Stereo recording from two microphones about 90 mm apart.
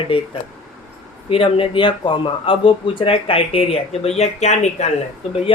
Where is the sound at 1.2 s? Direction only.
90° left.